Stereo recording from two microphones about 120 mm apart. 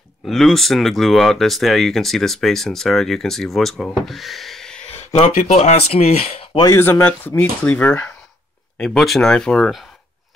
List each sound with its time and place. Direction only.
0.2 s speech: centre (ahead or behind)
4.8 s speech: 60° left (ahead or behind)
6.6 s speech: 20° left (ahead or behind); by 9.8 s centre (ahead or behind)